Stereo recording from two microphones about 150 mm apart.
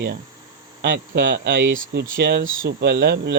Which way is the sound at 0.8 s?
80° right.